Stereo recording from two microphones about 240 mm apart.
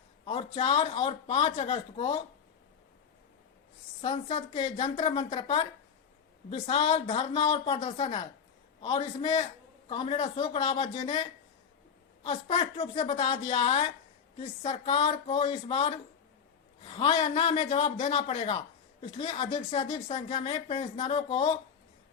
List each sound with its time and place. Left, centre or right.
0.3 s a woman's voice: left
4.0 s a woman's voice: left